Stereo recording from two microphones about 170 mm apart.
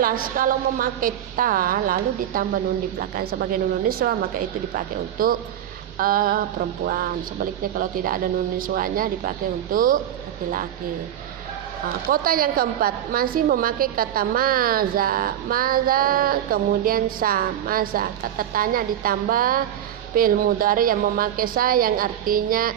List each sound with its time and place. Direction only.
0.0 s a woman's voice: 55° right (ahead or behind)
12.0 s a woman's voice: 60° right (ahead or behind)